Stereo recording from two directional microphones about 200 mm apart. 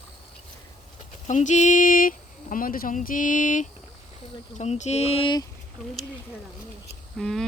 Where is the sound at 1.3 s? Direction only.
35° left (ahead or behind).